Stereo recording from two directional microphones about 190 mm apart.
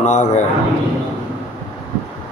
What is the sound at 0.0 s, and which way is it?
Speech, 35° left (ahead or behind).